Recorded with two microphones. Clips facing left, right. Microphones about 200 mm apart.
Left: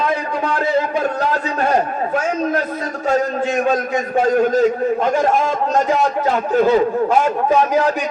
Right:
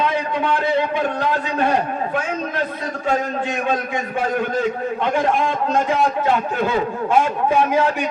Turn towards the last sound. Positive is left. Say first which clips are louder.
# left 2 dB
turn(degrees=40)  # may be behind; listen again after turning